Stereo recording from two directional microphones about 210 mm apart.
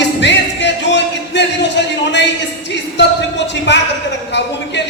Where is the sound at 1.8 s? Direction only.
55° left (ahead or behind).